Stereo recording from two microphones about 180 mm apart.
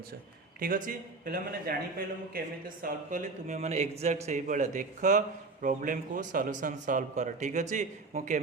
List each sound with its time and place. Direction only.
0.6 s speech: 50° right (ahead or behind)